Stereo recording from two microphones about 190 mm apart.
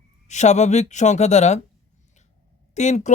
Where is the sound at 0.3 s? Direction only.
35° left (ahead or behind).